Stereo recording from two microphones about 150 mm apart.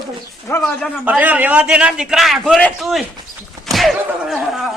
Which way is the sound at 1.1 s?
10° right (ahead or behind).